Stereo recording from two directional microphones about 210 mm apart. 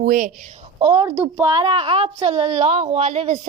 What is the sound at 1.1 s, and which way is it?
Speech, 5° right (ahead or behind).